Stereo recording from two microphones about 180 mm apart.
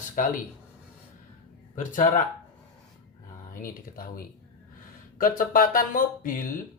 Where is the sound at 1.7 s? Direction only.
45° left (ahead or behind).